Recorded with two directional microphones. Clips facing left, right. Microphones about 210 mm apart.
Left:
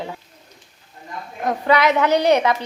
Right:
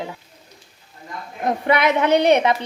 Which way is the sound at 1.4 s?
25° right (ahead or behind).